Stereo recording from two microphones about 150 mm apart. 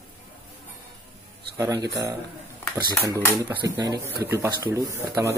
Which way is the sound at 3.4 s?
25° right (ahead or behind).